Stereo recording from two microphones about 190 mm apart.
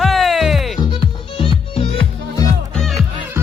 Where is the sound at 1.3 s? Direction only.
30° left (ahead or behind).